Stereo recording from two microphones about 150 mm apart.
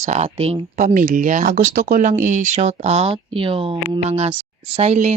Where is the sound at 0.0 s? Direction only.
50° right (ahead or behind).